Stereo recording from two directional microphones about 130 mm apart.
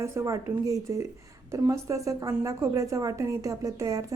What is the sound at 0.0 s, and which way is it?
A woman's voice, 20° right (ahead or behind).